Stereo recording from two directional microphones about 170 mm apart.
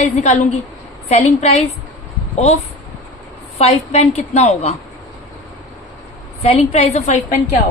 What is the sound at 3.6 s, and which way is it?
A woman's voice, 40° left (ahead or behind).